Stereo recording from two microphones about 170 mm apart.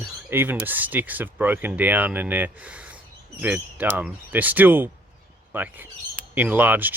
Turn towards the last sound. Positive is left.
turn(degrees=-10)  # may be behind; listen again after turning